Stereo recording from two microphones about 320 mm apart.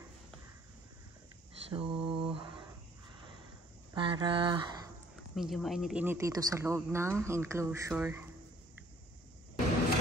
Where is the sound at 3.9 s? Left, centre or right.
Centre.